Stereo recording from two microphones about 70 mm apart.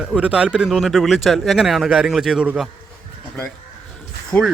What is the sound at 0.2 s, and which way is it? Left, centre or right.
Speech, centre.